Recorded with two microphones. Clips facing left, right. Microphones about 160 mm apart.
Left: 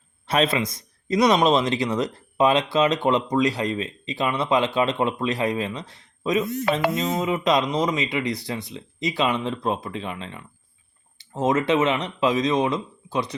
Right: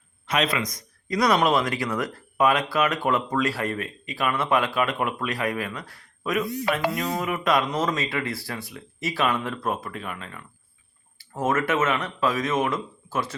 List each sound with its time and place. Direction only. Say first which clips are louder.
0.3 s speech: left 3 dB; 30° left (ahead or behind)